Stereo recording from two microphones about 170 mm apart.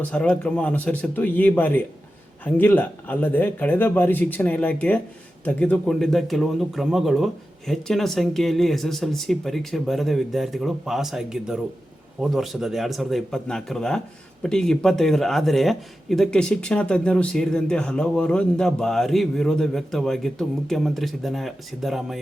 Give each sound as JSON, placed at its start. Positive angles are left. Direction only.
{"t": 0.1, "sound": "a man's voice", "side_deg": 5}